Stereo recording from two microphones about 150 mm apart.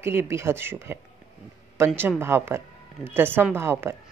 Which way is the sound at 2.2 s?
15° right (ahead or behind).